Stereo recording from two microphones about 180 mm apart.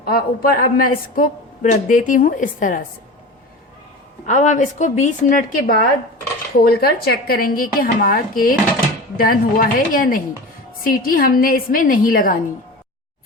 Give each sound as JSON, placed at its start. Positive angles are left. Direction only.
{"t": 0.0, "sound": "a woman's voice", "side_deg": 55}
{"t": 4.3, "sound": "a woman's voice", "side_deg": 45}